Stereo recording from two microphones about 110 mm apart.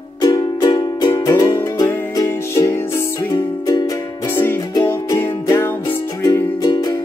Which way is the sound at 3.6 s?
35° left (ahead or behind).